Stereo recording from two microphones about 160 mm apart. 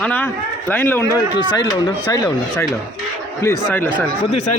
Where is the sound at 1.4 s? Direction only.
25° left (ahead or behind).